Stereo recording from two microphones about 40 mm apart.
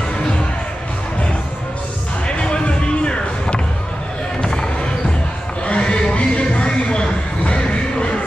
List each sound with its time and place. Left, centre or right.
2.2 s music: left
4.4 s basketball bounce: centre
5.7 s a sound: left